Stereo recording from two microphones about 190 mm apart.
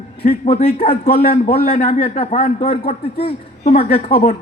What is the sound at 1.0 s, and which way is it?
Speech, 50° left (ahead or behind).